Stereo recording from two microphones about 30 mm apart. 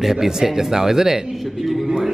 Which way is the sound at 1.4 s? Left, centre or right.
Centre.